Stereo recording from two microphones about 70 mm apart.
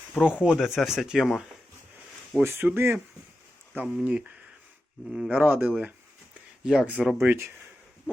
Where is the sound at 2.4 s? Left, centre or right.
Right.